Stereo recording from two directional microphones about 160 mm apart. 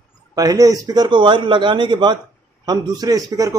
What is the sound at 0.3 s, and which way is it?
A man's voice, 20° right (ahead or behind).